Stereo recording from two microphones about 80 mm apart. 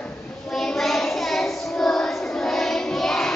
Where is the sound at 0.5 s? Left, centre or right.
Centre.